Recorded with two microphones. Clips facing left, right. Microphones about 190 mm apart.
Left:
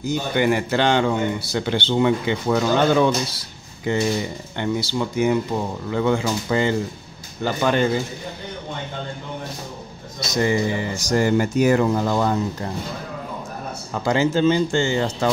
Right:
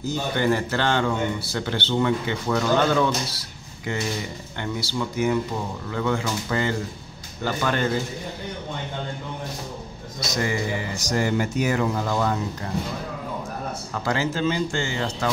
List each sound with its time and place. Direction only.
0.0 s a man's voice: 15° left (ahead or behind)
3.3 s a sound: 25° left (ahead or behind)
4.6 s a man's voice: 20° left (ahead or behind)
10.4 s speech: 25° left (ahead or behind)
11.1 s speech: 40° left (ahead or behind)
14.0 s speech: 20° left (ahead or behind)